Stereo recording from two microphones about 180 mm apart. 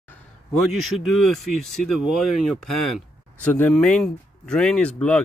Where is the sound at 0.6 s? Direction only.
Centre (ahead or behind).